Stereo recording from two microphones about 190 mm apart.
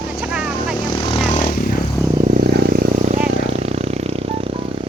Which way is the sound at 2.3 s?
50° right (ahead or behind).